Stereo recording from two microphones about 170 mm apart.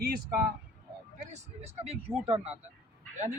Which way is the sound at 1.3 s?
40° right (ahead or behind).